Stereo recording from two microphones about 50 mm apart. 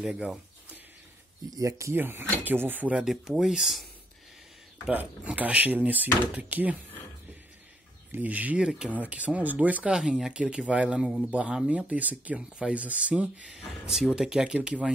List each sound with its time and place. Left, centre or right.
0.0 s speech: centre
1.6 s speech: right
2.0 s speech: right
3.1 s speech: centre
4.9 s speech: right
8.2 s speech: right
8.5 s speech: centre
8.9 s speech: right
9.9 s speech: centre; by 12.4 s right
12.4 s speech: right
13.8 s speech: centre